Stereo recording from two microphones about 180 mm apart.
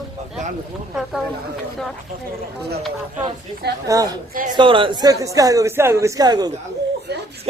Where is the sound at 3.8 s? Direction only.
20° right (ahead or behind).